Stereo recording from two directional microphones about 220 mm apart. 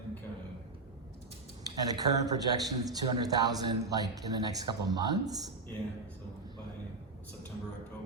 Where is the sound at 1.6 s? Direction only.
15° right (ahead or behind).